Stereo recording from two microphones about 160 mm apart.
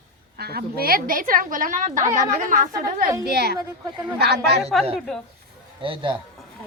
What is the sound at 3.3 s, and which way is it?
Speech, 90° right.